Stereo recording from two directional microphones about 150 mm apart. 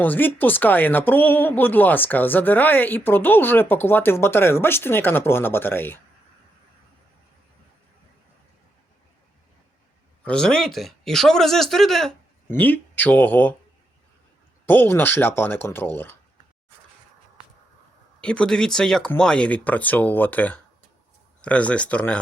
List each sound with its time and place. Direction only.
0.0 s speech: 10° left (ahead or behind)
10.2 s speech: 5° left (ahead or behind)
14.7 s speech: 15° left (ahead or behind)
18.2 s speech: 5° left (ahead or behind)